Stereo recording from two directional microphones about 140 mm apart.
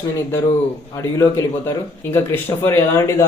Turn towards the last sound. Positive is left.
turn(degrees=20)  # may be behind; listen again after turning